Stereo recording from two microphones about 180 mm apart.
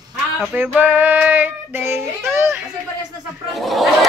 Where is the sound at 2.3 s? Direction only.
15° right (ahead or behind).